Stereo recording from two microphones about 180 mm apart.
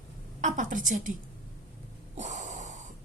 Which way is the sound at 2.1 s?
40° right (ahead or behind).